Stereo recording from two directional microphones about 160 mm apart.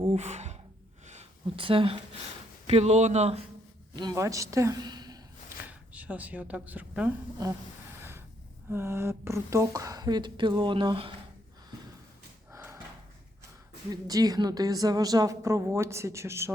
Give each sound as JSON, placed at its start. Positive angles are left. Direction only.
{"t": 0.0, "sound": "gasp", "side_deg": -45}
{"t": 1.0, "sound": "a sound", "side_deg": -45}
{"t": 1.5, "sound": "speech", "side_deg": -35}
{"t": 3.9, "sound": "speech", "side_deg": -20}
{"t": 5.6, "sound": "speech", "side_deg": -10}
{"t": 8.7, "sound": "a woman's voice", "side_deg": -15}
{"t": 12.5, "sound": "a sound", "side_deg": -15}
{"t": 13.9, "sound": "a woman's voice", "side_deg": -25}